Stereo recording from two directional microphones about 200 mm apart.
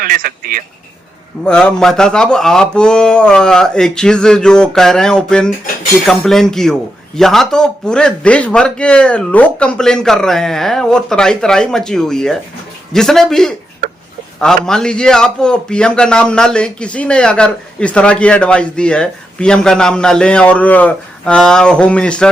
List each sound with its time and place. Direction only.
0.0 s speech: 45° right (ahead or behind)
1.5 s a man's voice: 5° left (ahead or behind)